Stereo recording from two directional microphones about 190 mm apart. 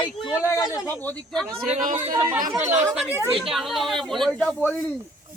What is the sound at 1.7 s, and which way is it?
Speech, 45° right (ahead or behind).